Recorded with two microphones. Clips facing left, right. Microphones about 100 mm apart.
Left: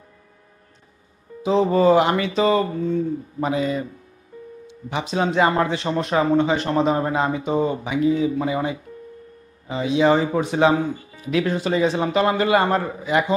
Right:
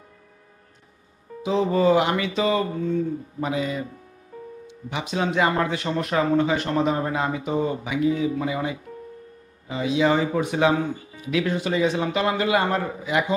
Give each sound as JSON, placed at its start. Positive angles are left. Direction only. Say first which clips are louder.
{"t": 1.4, "sound": "speech", "louder": "left 3 dB", "side_deg": 35}
{"t": 4.8, "sound": "a man's voice", "louder": "left 3 dB", "side_deg": 35}